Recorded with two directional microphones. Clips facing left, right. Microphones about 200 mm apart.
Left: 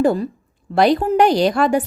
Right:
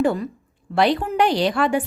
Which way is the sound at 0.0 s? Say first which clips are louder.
Left 4 dB; 35° left (ahead or behind).